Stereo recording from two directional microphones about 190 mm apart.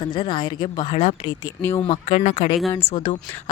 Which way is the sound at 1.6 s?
10° left (ahead or behind).